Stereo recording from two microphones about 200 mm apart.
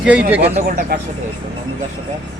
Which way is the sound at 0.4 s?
30° right (ahead or behind).